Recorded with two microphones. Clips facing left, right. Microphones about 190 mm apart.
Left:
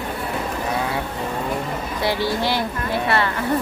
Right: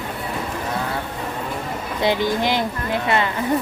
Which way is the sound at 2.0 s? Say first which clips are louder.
Right 3 dB; 20° right (ahead or behind).